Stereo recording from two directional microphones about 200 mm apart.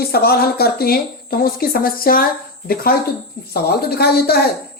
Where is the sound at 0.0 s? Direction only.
50° left (ahead or behind).